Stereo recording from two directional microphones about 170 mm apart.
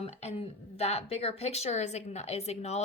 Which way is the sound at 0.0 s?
35° left (ahead or behind).